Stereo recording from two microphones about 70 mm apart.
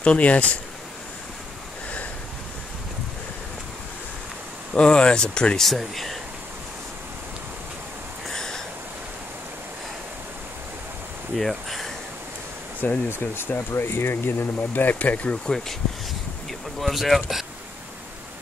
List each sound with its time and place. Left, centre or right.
0.0 s speech: centre
4.7 s speech: centre
8.3 s a sound: centre
11.3 s speech: centre
12.8 s speech: left
16.8 s speech: centre